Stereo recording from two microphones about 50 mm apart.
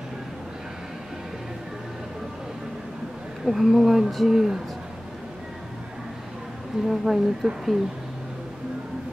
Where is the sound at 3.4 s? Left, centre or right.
Centre.